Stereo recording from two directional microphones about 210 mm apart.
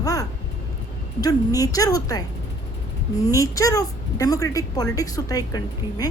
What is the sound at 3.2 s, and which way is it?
A woman's voice, 15° left (ahead or behind).